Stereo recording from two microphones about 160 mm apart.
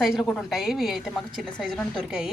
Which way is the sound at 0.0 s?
Centre (ahead or behind).